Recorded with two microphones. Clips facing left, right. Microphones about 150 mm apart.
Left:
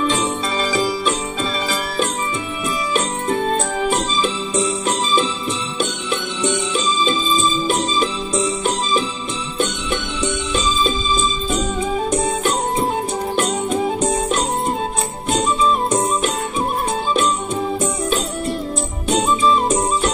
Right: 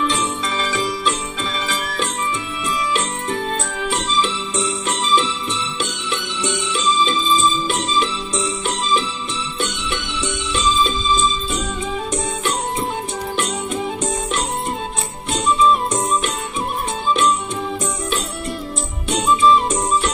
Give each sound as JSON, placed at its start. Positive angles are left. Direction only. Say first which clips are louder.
{"t": 0.1, "sound": "music", "louder": "left 2 dB", "side_deg": 35}
{"t": 2.9, "sound": "music", "louder": "left 3 dB", "side_deg": 45}
{"t": 6.7, "sound": "music", "louder": "even", "side_deg": 45}
{"t": 13.4, "sound": "music", "louder": "left 5 dB", "side_deg": 40}
{"t": 19.0, "sound": "music", "louder": "right 1 dB", "side_deg": 40}